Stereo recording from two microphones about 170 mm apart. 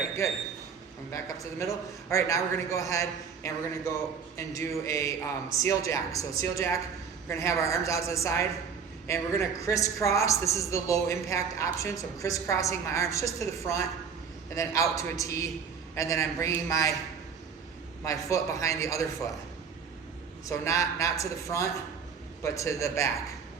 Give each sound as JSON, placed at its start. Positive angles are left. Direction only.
{"t": 1.1, "sound": "a man's voice", "side_deg": 20}
{"t": 18.0, "sound": "a man's voice", "side_deg": 20}
{"t": 20.5, "sound": "a man's voice", "side_deg": 15}